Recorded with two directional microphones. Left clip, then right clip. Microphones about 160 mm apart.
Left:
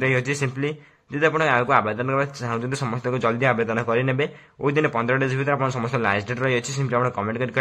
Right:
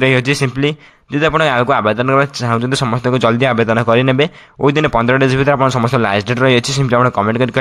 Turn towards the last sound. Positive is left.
turn(degrees=-35)  # may be behind; listen again after turning